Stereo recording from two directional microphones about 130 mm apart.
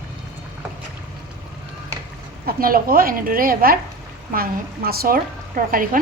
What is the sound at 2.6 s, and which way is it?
A woman's voice, 90° right.